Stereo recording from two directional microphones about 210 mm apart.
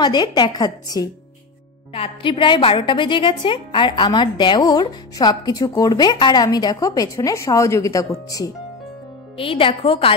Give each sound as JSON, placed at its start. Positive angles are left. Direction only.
{"t": 0.0, "sound": "a woman's voice", "side_deg": 20}